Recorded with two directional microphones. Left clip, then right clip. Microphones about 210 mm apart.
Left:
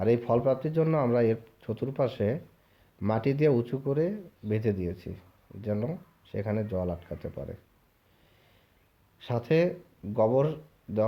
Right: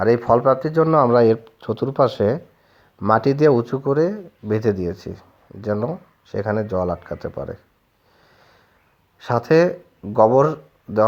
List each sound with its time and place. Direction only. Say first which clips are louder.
0.1 s speech: right 9 dB; 20° right (ahead or behind)
9.2 s speech: right 10 dB; 20° right (ahead or behind)